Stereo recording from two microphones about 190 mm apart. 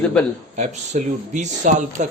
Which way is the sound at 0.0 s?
5° left (ahead or behind).